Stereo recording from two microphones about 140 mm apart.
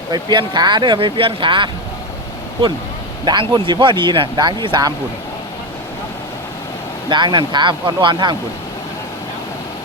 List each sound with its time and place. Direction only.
0.1 s speech: 30° right (ahead or behind)
3.2 s speech: 30° right (ahead or behind)
7.1 s speech: 30° right (ahead or behind)